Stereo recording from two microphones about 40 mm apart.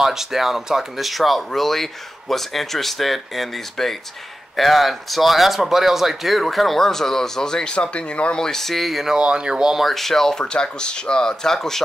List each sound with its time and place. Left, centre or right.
0.0 s speech: centre; by 8.4 s left
8.4 s speech: centre
9.1 s speech: right
9.8 s speech: centre
10.4 s speech: left